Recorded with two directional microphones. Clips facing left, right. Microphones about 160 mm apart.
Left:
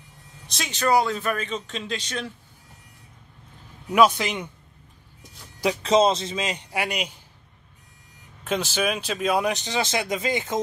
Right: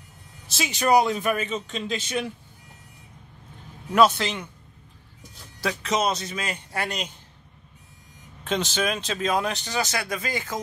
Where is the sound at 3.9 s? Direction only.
10° left (ahead or behind).